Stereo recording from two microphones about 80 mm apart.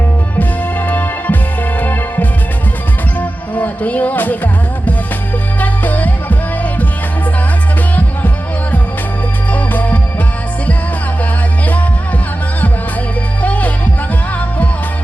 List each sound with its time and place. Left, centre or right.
0.3 s music: left
5.5 s music: left
9.5 s music: left
13.4 s music: centre